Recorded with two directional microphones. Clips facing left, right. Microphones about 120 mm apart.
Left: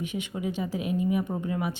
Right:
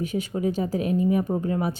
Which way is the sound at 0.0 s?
40° right (ahead or behind).